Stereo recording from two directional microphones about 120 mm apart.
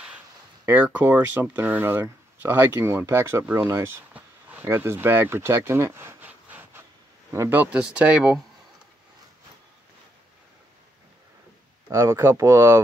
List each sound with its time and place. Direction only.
0.8 s speech: 15° right (ahead or behind)
3.6 s a sound: 15° right (ahead or behind)
4.6 s speech: 20° right (ahead or behind)
11.9 s speech: 20° right (ahead or behind)